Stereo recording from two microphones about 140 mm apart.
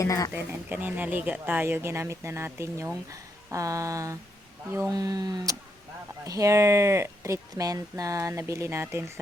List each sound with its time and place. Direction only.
0.0 s speech: 25° left (ahead or behind)
0.3 s speech: 15° right (ahead or behind)